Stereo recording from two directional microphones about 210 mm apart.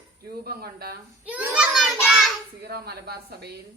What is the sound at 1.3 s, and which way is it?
Child singing, 5° right (ahead or behind).